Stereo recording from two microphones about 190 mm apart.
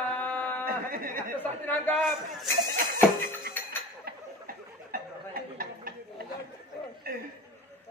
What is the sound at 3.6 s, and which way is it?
Music, 10° left (ahead or behind).